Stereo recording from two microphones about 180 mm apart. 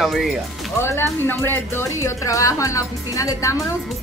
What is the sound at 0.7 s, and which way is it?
A woman's voice, 15° left (ahead or behind).